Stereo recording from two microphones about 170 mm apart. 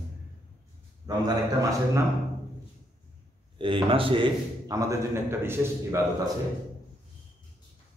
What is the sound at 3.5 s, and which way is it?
A man's voice, 30° right (ahead or behind).